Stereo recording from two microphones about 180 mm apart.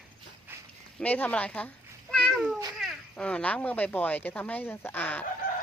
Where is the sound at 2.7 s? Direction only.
Centre (ahead or behind).